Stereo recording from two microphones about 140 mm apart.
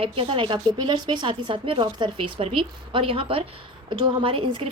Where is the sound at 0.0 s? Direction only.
40° right (ahead or behind).